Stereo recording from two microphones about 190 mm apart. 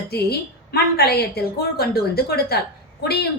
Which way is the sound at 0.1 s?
55° left (ahead or behind).